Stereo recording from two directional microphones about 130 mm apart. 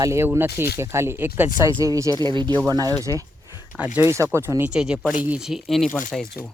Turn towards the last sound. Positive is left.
turn(degrees=0)  # may be behind; listen again after turning